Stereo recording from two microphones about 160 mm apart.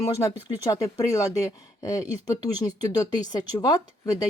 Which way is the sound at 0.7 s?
20° left (ahead or behind).